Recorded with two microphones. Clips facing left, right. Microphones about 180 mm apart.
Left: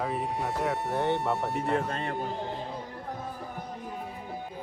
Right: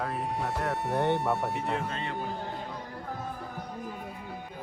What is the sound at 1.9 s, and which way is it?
Speech, 55° left (ahead or behind).